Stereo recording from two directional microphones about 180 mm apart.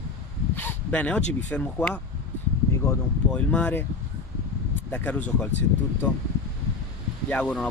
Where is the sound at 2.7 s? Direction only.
15° left (ahead or behind).